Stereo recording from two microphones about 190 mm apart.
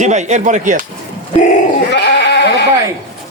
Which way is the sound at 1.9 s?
65° left (ahead or behind).